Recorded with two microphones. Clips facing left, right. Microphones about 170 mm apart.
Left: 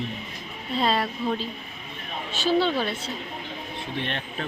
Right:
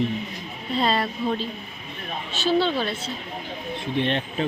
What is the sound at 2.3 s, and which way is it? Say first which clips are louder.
Speech: right 1 dB; 10° left (ahead or behind).